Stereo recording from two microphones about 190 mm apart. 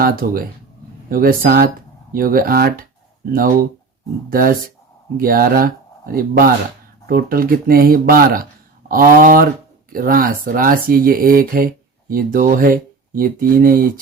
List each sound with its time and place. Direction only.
0.0 s speech: 50° right (ahead or behind)
4.3 s speech: 50° right (ahead or behind)